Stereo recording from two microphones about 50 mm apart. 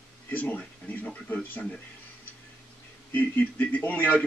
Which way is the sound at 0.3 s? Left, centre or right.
Left.